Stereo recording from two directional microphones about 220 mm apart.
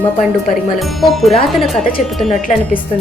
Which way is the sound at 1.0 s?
Centre (ahead or behind).